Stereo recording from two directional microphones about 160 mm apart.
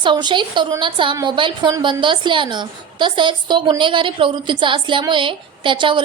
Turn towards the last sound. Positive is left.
turn(degrees=-30)  # may be behind; listen again after turning